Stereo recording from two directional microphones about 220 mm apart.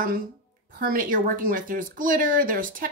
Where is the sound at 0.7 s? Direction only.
40° right (ahead or behind).